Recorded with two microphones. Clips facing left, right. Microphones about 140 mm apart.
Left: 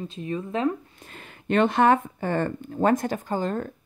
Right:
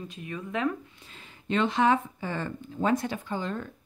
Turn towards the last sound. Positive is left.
turn(degrees=45)  # may be behind; listen again after turning